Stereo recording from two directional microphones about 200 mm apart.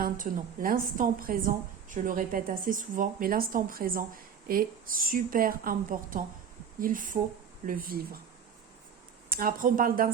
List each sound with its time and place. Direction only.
0.0 s a woman's voice: 45° right (ahead or behind)
9.3 s a woman's voice: 45° right (ahead or behind)